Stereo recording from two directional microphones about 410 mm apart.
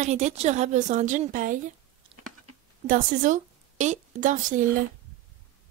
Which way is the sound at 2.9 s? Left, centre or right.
Centre.